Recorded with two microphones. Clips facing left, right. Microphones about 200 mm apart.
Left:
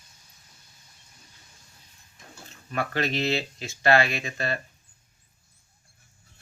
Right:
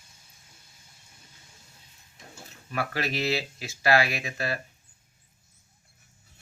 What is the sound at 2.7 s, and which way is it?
Speech, 5° right (ahead or behind).